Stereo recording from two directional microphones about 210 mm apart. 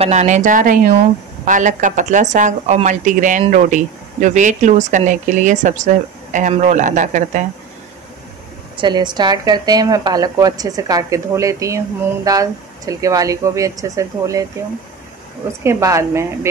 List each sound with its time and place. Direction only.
0.0 s speech: 35° right (ahead or behind)
8.7 s a woman's voice: 20° right (ahead or behind)
15.6 s a woman's voice: 15° right (ahead or behind)